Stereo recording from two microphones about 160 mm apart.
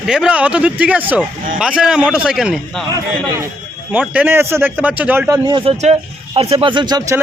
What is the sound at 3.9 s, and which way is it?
A man's voice, 10° right (ahead or behind).